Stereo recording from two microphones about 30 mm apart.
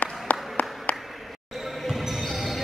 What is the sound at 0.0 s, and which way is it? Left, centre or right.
Applause, left.